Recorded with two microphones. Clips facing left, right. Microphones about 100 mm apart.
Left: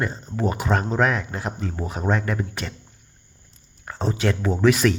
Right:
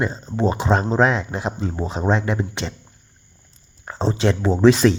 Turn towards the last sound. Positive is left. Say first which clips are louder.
# right 4 dB
turn(degrees=-25)  # may be behind; listen again after turning